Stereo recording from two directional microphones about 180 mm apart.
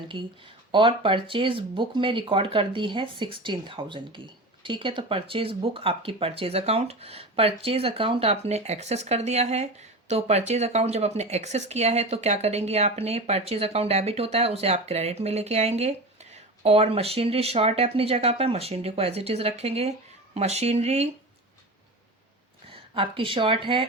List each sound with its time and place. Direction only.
0.7 s speech: 30° right (ahead or behind)
22.6 s speech: 30° right (ahead or behind)